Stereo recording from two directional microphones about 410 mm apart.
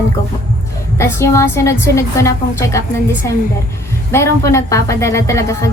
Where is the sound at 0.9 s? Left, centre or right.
Centre.